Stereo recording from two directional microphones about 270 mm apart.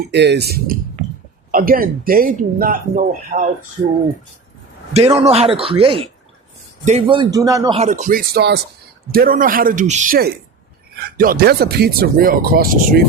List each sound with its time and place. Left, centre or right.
0.1 s speech: right
5.1 s speech: right
7.8 s speech: right